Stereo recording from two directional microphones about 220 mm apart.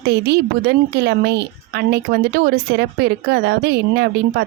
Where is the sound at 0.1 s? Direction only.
50° right (ahead or behind).